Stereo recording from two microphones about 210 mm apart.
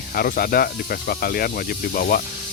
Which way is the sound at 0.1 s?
45° left (ahead or behind).